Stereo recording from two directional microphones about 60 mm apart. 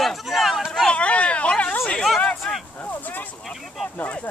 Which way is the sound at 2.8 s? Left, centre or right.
Left.